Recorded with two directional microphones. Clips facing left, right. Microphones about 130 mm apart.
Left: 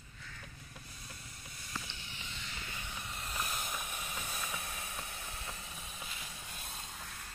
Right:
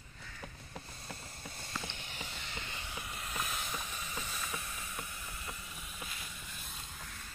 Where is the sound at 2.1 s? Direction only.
40° right (ahead or behind).